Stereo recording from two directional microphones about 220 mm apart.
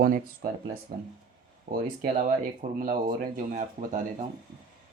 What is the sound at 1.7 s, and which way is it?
Speech, 30° right (ahead or behind).